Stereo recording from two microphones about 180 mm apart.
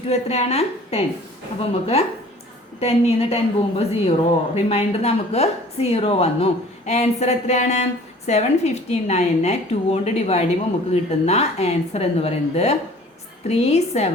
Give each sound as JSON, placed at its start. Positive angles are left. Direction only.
{"t": 0.1, "sound": "speech", "side_deg": 35}